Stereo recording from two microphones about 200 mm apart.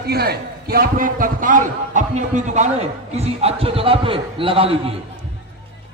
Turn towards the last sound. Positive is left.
turn(degrees=-25)  # may be behind; listen again after turning